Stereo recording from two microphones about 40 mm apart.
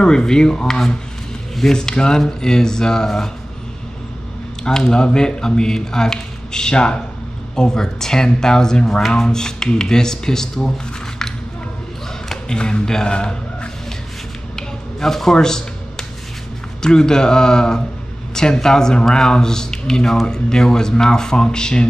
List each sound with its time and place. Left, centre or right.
0.0 s speech: centre
4.6 s speech: centre
12.4 s speech: left
14.5 s a sound: centre
16.8 s speech: centre